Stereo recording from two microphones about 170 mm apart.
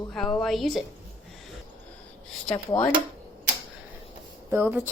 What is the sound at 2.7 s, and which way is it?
Speech, 20° left (ahead or behind).